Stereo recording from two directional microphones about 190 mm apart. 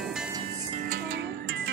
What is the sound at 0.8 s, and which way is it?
Music, 55° right (ahead or behind).